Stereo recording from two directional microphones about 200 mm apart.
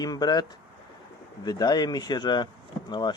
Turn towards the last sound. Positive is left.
turn(degrees=20)  # may be behind; listen again after turning